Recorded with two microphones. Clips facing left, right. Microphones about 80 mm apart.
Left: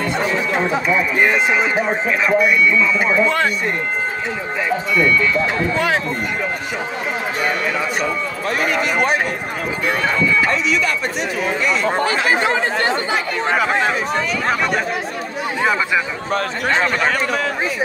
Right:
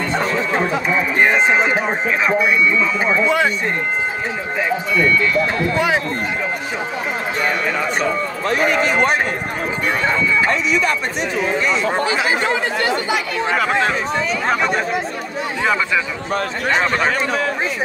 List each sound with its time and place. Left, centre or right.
1.2 s speech: right
8.5 s speech: right
10.4 s speech: right
11.8 s speech: left
14.5 s speech: centre